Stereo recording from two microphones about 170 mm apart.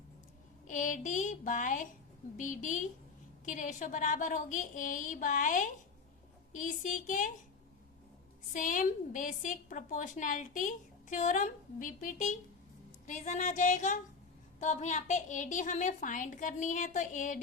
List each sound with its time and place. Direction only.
0.7 s a woman's voice: 50° left (ahead or behind)
8.5 s a woman's voice: 50° left (ahead or behind)